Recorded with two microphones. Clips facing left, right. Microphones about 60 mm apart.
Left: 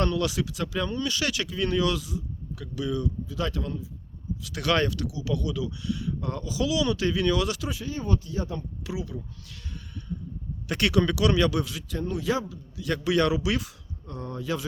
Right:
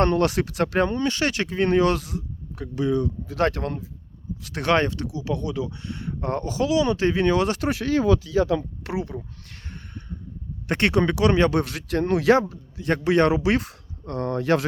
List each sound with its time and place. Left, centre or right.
0.0 s speech: right
2.6 s speech: right
3.2 s a man's voice: right
4.4 s speech: right
7.7 s speech: right
8.8 s a sound: right
10.7 s speech: right
11.6 s a man's voice: right
12.5 s speech: right